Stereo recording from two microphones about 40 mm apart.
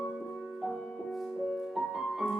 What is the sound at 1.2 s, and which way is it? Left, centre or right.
Music, centre.